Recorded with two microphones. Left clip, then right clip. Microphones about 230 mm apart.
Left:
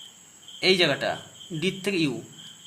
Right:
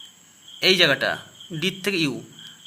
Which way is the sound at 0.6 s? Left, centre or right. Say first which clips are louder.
Right 4 dB; right.